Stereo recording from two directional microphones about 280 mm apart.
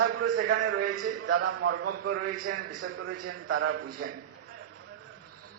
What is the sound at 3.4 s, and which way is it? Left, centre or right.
Speech, right.